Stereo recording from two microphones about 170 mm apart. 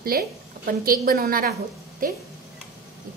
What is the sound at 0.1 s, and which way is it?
A woman's voice, 60° right (ahead or behind).